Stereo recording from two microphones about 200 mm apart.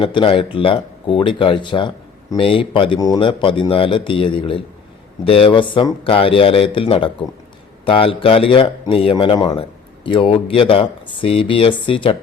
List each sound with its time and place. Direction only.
0.0 s speech: 25° left (ahead or behind)